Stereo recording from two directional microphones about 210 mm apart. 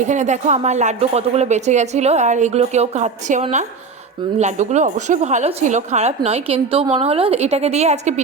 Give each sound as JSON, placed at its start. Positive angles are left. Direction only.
{"t": 0.0, "sound": "a woman's voice", "side_deg": -35}